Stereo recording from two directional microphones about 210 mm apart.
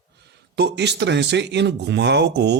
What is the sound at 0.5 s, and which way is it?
Speech, 55° right (ahead or behind).